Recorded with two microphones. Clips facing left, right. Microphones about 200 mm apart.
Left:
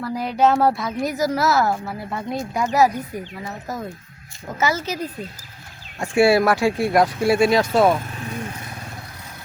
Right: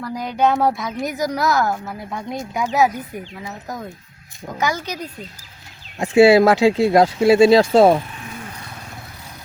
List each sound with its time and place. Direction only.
0.0 s a woman's voice: 5° left (ahead or behind)
6.0 s speech: 20° right (ahead or behind)